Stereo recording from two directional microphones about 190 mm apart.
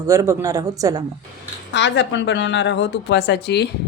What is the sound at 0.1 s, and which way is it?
Speech, 15° right (ahead or behind).